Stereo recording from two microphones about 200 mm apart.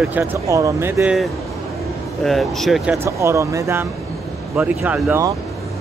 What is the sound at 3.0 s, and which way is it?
Speech, 15° right (ahead or behind).